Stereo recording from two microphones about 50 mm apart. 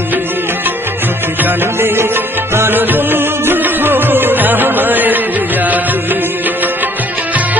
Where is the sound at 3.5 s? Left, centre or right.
Right.